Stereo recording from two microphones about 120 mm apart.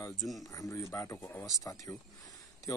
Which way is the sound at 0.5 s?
25° left (ahead or behind).